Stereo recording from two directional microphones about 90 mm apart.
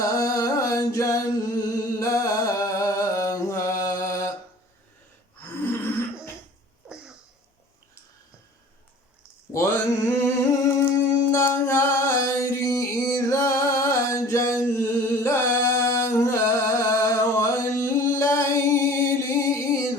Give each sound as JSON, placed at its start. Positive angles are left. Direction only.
{"t": 0.0, "sound": "singing", "side_deg": 40}
{"t": 9.5, "sound": "mantra", "side_deg": 30}
{"t": 10.8, "sound": "a sound", "side_deg": 25}